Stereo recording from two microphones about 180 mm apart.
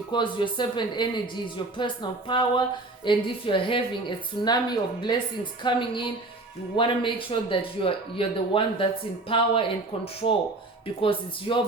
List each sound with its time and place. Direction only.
0.1 s speech: 25° left (ahead or behind)